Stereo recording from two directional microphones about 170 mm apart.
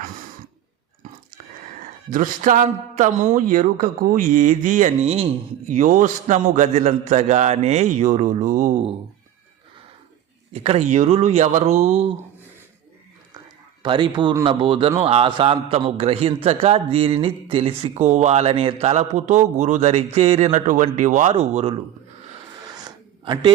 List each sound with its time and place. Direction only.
1.8 s a man's voice: 50° right (ahead or behind)
10.5 s a man's voice: 35° right (ahead or behind)
13.8 s a man's voice: 30° right (ahead or behind)
22.6 s a sound: 25° right (ahead or behind)